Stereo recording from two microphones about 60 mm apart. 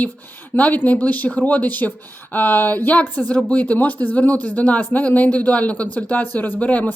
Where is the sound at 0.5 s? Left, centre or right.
Left.